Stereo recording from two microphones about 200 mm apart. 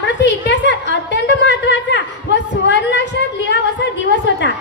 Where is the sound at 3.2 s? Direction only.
55° left (ahead or behind).